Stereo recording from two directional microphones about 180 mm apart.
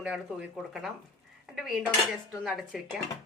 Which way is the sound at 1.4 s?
Centre (ahead or behind).